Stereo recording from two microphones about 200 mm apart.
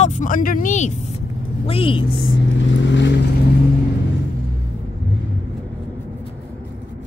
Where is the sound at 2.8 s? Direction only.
60° left (ahead or behind).